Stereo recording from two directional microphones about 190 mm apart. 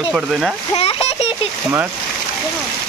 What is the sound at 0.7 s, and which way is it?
Splash, 30° left (ahead or behind).